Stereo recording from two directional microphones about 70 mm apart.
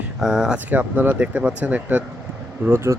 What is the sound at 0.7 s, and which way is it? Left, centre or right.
Speech, right.